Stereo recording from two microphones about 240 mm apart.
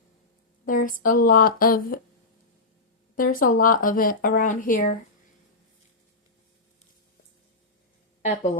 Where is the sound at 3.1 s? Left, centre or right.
Left.